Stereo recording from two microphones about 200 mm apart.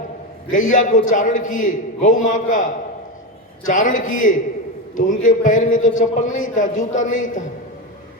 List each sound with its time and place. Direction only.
0.5 s a man's voice: 40° left (ahead or behind)